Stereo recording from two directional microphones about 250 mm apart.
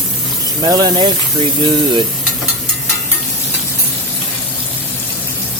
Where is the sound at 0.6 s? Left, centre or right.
Centre.